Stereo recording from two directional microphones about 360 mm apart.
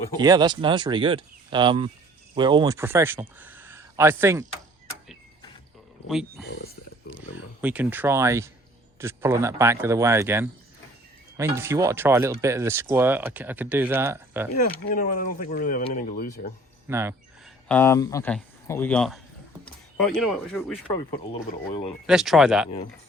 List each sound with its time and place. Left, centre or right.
0.2 s speech: centre
6.1 s a man's voice: centre
7.6 s a man's voice: centre
14.9 s speech: left
16.9 s speech: centre
17.7 s a man's voice: centre
22.0 s a man's voice: centre